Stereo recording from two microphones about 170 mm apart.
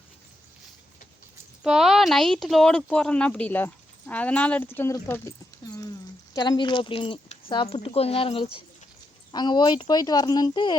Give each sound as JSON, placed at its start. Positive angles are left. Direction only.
{"t": 1.6, "sound": "speech", "side_deg": 0}
{"t": 6.3, "sound": "speech", "side_deg": 25}